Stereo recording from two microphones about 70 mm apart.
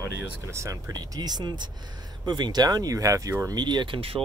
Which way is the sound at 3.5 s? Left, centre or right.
Right.